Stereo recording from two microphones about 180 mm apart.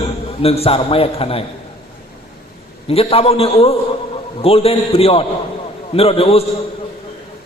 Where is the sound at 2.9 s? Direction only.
35° left (ahead or behind).